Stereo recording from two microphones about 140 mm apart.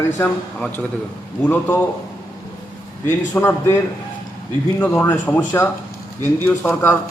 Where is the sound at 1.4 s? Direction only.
15° left (ahead or behind).